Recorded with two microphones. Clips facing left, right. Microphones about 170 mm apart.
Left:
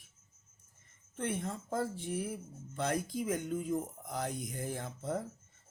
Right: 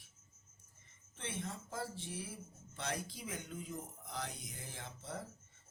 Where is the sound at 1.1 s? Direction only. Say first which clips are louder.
Left 8 dB; 50° left (ahead or behind).